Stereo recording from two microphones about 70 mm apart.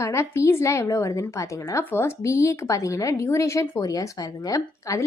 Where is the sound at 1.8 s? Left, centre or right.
Left.